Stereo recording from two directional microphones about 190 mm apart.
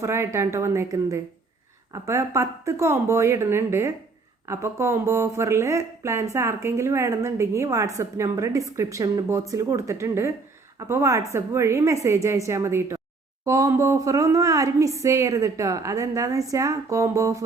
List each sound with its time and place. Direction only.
0.0 s speech: 15° right (ahead or behind)